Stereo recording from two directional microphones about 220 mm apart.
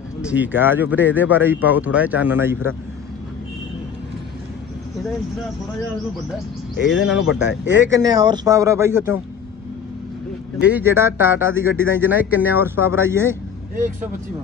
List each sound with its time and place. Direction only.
0.2 s speech: 5° right (ahead or behind)
6.8 s speech: 55° left (ahead or behind)
7.9 s speech: 15° right (ahead or behind)
10.7 s speech: 10° right (ahead or behind)